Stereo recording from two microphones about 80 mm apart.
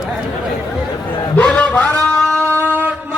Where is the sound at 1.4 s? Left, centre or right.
Centre.